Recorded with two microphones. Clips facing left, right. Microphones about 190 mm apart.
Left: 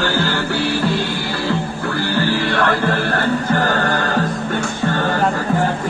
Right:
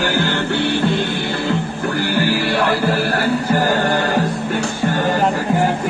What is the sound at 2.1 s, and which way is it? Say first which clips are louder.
Music: even; 10° right (ahead or behind).